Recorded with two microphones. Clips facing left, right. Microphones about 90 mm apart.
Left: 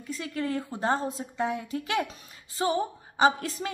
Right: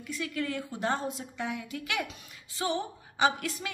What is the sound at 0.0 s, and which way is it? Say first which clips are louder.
A woman's voice: left 2 dB; 30° left (ahead or behind).